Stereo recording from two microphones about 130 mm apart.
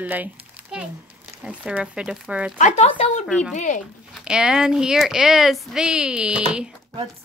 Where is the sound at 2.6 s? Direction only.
65° left (ahead or behind).